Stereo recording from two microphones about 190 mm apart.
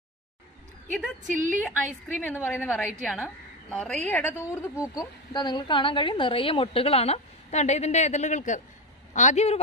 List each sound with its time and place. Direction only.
1.2 s a woman's voice: 40° right (ahead or behind)
2.1 s a woman's voice: 10° left (ahead or behind); by 9.6 s 35° left (ahead or behind)